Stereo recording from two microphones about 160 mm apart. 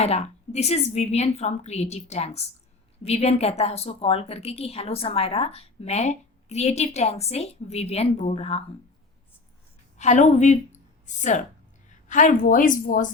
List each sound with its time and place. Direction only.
0.0 s a woman's voice: 45° left (ahead or behind)
10.0 s a woman's voice: 45° left (ahead or behind)